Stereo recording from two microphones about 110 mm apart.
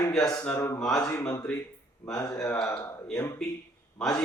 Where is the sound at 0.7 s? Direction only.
5° left (ahead or behind).